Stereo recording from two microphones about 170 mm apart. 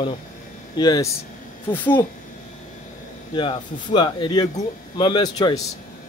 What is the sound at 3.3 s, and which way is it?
A man's voice, 30° left (ahead or behind).